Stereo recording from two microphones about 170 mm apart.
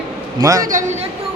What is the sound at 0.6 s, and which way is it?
Speech, 45° right (ahead or behind).